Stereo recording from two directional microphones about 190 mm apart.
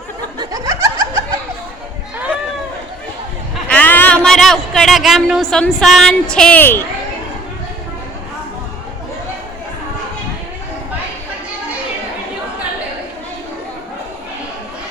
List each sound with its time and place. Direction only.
0.3 s snicker: 15° right (ahead or behind)
3.7 s a sound: 10° left (ahead or behind)
6.3 s a woman's voice: 5° left (ahead or behind)